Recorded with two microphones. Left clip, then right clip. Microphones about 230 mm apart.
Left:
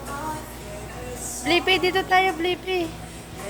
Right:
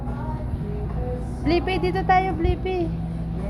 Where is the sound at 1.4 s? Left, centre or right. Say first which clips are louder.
Left 3 dB; centre.